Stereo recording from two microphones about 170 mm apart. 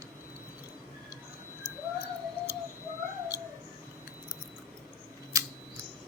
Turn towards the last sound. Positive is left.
turn(degrees=-20)  # may be behind; listen again after turning